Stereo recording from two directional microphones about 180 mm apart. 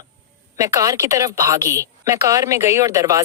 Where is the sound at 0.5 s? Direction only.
20° right (ahead or behind).